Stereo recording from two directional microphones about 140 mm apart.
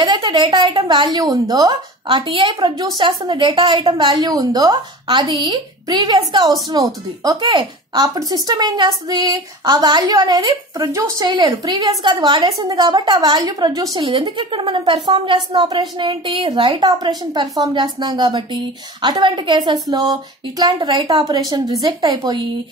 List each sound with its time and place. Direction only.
0.0 s a woman's voice: 35° right (ahead or behind)